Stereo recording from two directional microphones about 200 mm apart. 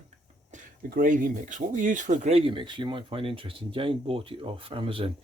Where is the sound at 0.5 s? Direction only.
40° right (ahead or behind).